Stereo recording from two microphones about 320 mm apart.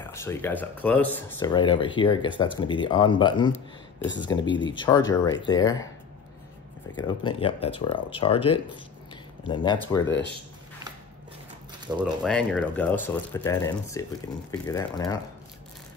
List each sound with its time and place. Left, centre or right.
0.1 s speech: centre
7.0 s speech: centre
8.7 s a sound: centre
10.0 s speech: left
12.2 s speech: centre